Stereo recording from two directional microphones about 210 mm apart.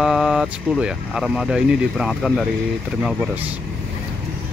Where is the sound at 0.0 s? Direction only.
Centre (ahead or behind).